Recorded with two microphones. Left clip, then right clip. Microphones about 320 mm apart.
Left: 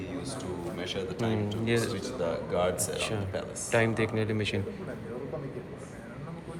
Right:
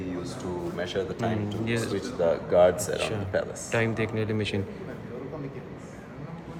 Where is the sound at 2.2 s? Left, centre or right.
Right.